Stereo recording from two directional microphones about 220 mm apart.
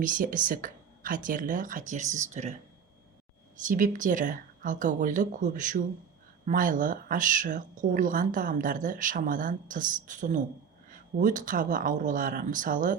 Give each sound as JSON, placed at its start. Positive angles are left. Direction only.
{"t": 0.0, "sound": "a woman's voice", "side_deg": -40}
{"t": 3.7, "sound": "a woman's voice", "side_deg": -35}